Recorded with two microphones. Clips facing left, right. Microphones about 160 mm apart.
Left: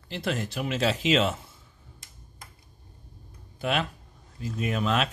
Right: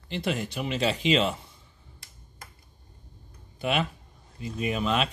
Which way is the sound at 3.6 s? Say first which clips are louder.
Right 1 dB; centre (ahead or behind).